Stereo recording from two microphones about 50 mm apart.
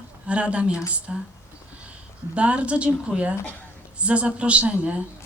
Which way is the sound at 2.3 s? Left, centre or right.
Right.